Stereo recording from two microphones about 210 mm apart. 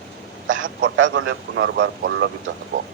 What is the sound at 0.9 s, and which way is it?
Speech, 65° right (ahead or behind).